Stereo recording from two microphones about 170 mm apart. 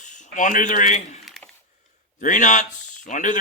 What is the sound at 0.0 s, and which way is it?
Speech, 45° left (ahead or behind).